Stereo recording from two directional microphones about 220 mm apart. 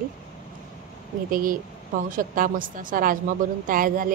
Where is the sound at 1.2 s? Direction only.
40° right (ahead or behind).